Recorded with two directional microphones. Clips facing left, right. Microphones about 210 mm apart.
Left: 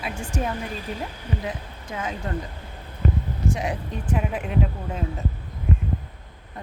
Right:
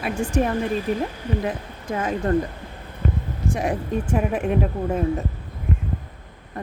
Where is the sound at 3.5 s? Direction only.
55° right (ahead or behind).